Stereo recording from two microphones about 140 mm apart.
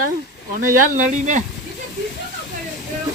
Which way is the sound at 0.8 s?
65° right (ahead or behind).